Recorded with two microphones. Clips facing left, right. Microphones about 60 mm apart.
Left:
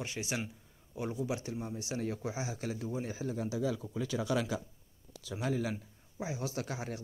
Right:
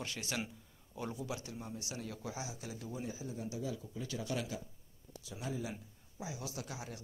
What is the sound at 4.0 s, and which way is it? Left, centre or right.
Speech, left.